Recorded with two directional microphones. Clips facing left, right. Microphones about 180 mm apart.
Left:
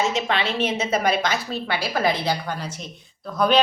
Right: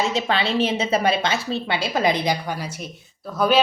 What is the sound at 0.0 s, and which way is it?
A woman's voice, 35° right (ahead or behind).